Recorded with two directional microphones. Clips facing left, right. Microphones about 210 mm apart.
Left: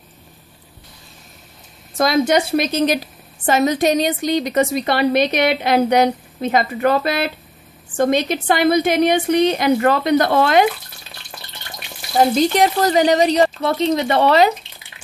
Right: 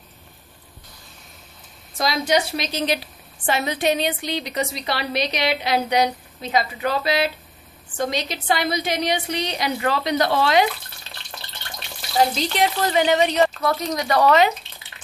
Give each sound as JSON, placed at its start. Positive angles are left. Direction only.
{"t": 2.0, "sound": "a woman's voice", "side_deg": 50}
{"t": 12.2, "sound": "speech", "side_deg": 45}